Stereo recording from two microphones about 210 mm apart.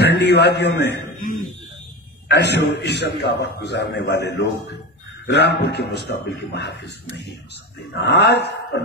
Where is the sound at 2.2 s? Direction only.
55° left (ahead or behind).